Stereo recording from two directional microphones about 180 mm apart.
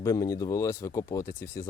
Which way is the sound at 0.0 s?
15° left (ahead or behind).